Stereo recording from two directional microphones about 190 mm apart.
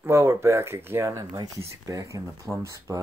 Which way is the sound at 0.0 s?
15° right (ahead or behind).